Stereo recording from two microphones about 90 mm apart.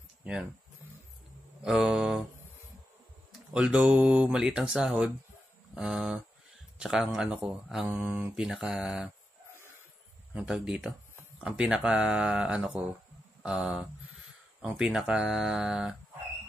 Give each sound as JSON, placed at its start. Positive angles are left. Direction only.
{"t": 0.2, "sound": "speech", "side_deg": -10}
{"t": 1.6, "sound": "speech", "side_deg": -5}
{"t": 3.3, "sound": "speech", "side_deg": -10}
{"t": 7.9, "sound": "speech", "side_deg": -25}
{"t": 8.4, "sound": "speech", "side_deg": -5}
{"t": 10.3, "sound": "speech", "side_deg": -10}
{"t": 14.6, "sound": "speech", "side_deg": -5}